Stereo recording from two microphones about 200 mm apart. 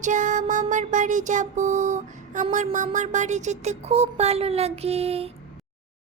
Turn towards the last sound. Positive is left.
turn(degrees=-30)  # may be behind; listen again after turning